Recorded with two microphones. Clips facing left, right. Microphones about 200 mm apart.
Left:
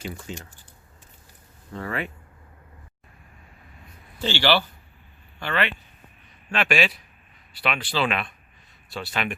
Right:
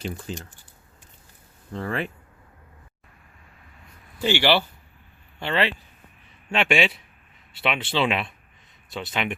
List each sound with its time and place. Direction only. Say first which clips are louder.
1.7 s speech: right 2 dB; 30° right (ahead or behind)
4.2 s speech: right 2 dB; 15° right (ahead or behind)